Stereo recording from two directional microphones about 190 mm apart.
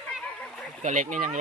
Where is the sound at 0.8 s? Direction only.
40° right (ahead or behind).